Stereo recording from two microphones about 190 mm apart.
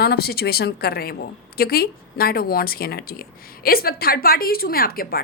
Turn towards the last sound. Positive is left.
turn(degrees=50)  # may be behind; listen again after turning